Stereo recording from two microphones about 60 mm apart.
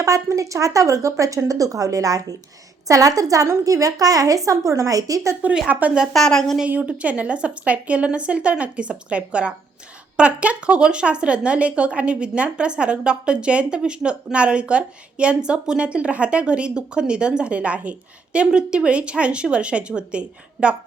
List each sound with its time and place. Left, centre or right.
0.0 s speech: right
2.8 s a woman's voice: right
4.4 s a woman's voice: right
5.6 s a woman's voice: centre
6.1 s a woman's voice: centre
6.7 s a woman's voice: right